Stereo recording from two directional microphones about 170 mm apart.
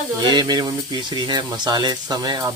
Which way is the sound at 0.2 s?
25° right (ahead or behind).